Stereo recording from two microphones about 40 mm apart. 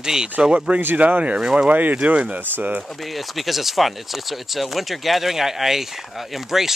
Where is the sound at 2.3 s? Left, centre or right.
Right.